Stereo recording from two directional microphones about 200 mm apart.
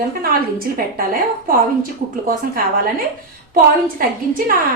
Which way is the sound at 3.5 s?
45° right (ahead or behind).